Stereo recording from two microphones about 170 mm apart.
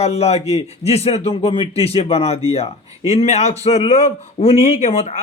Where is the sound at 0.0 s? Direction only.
40° left (ahead or behind).